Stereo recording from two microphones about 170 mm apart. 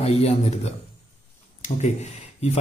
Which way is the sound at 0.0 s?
40° left (ahead or behind).